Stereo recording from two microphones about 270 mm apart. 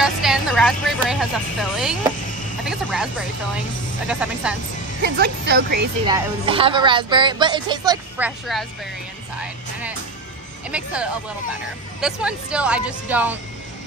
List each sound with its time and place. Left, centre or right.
0.0 s a woman's voice: centre
5.0 s a woman's voice: right
6.0 s speech: centre
9.4 s music: centre
10.7 s a woman's voice: centre